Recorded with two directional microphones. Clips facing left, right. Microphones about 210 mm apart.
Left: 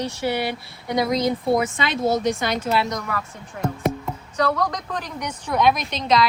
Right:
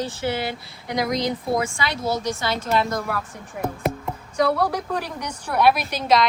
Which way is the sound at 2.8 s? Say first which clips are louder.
Right 1 dB; 5° right (ahead or behind).